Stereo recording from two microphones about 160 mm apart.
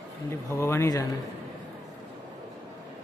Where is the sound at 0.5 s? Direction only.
15° left (ahead or behind).